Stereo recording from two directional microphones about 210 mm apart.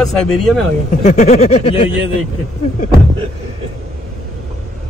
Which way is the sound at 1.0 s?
30° left (ahead or behind).